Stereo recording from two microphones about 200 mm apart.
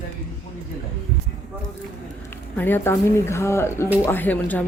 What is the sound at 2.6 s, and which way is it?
Speech, 10° left (ahead or behind).